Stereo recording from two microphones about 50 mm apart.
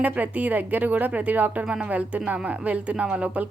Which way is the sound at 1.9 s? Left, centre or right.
Right.